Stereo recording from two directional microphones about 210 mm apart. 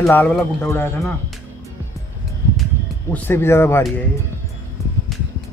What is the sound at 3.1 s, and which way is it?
Speech, 10° left (ahead or behind).